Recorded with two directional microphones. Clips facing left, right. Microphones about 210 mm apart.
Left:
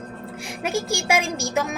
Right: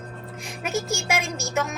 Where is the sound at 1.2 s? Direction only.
30° left (ahead or behind).